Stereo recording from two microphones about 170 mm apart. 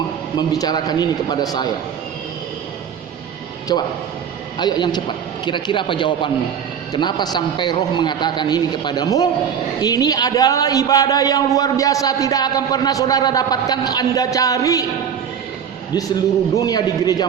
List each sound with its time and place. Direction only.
0.3 s a man's voice: 25° left (ahead or behind)
3.7 s a man's voice: 25° left (ahead or behind)
16.6 s a man's voice: 20° left (ahead or behind)